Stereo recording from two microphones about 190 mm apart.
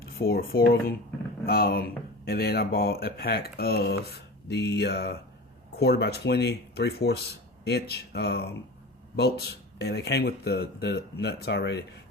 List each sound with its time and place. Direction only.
0.0 s speech: 55° left (ahead or behind)
9.7 s speech: 60° left (ahead or behind)